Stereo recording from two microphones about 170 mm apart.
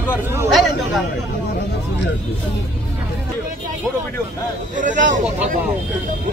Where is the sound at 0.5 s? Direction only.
Centre (ahead or behind).